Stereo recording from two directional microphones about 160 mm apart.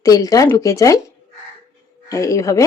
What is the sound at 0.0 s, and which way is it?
Speech, 20° left (ahead or behind).